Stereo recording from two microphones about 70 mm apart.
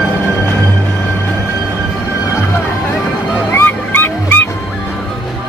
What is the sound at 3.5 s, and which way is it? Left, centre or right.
Music, left.